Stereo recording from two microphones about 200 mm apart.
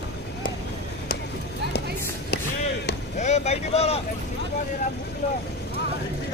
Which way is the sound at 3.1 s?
35° left (ahead or behind).